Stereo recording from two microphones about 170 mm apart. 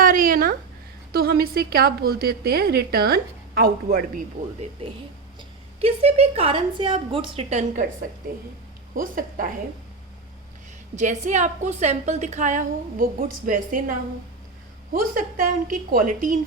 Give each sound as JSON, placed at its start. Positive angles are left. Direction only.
{"t": 0.0, "sound": "a sound", "side_deg": -55}
{"t": 1.1, "sound": "a woman's voice", "side_deg": -60}
{"t": 4.4, "sound": "a woman's voice", "side_deg": -50}
{"t": 5.4, "sound": "a woman's voice", "side_deg": -35}
{"t": 9.0, "sound": "a woman's voice", "side_deg": -55}
{"t": 10.9, "sound": "a woman's voice", "side_deg": -45}
{"t": 15.1, "sound": "a woman's voice", "side_deg": -55}